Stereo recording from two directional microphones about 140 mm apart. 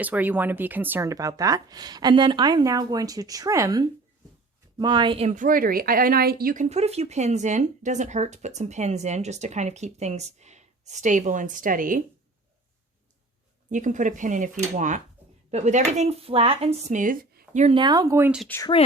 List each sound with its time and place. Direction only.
0.0 s speech: 10° right (ahead or behind); by 5.2 s 35° right (ahead or behind)
5.2 s a woman's voice: 65° right (ahead or behind); by 6.7 s 80° right
6.7 s speech: 50° right (ahead or behind); by 12.0 s 75° right (ahead or behind)
13.7 s speech: 65° right (ahead or behind); by 17.0 s 45° right (ahead or behind)
17.0 s speech: 75° right (ahead or behind); by 17.7 s 55° right (ahead or behind)
17.7 s speech: 30° right (ahead or behind)
18.5 s speech: 10° left (ahead or behind)